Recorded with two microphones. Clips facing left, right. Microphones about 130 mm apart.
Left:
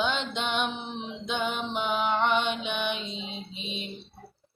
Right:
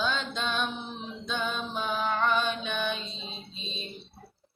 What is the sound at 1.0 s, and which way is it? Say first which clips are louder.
Music: left 3 dB; 20° left (ahead or behind).